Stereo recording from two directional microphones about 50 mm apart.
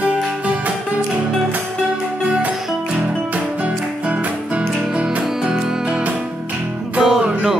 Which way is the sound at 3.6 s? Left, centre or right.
Right.